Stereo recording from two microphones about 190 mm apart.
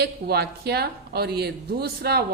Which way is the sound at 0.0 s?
55° right (ahead or behind).